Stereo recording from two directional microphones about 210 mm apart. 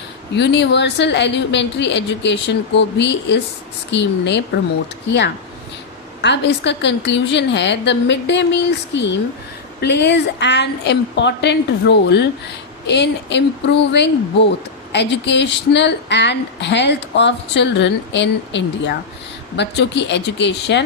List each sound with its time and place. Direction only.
0.3 s a woman's voice: 55° left (ahead or behind)